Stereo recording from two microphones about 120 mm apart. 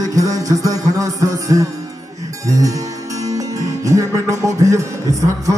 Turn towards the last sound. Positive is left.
turn(degrees=-25)  # may be behind; listen again after turning